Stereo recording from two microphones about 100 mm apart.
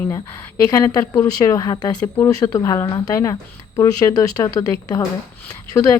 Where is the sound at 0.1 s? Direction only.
30° left (ahead or behind).